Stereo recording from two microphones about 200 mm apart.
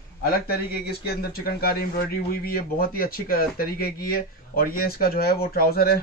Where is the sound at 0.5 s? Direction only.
50° left (ahead or behind).